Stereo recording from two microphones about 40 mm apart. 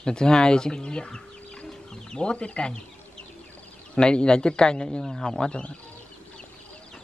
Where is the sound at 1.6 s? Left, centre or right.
Centre.